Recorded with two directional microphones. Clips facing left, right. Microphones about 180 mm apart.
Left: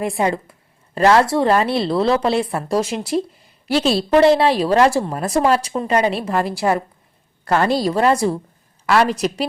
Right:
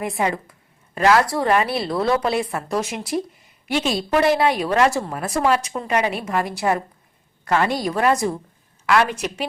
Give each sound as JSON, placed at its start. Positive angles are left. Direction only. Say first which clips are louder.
{"t": 0.0, "sound": "a woman's voice", "louder": "left 3 dB", "side_deg": 30}